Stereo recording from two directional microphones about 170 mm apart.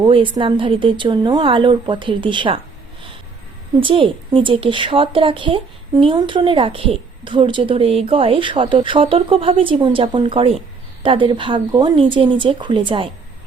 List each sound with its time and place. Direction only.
0.0 s a woman's voice: 30° right (ahead or behind)
3.8 s a woman's voice: 30° right (ahead or behind)